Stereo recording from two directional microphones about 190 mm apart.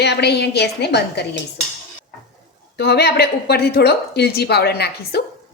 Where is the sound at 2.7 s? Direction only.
60° left (ahead or behind).